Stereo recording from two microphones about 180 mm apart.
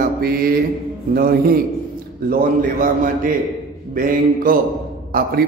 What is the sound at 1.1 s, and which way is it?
Speech, 55° right (ahead or behind).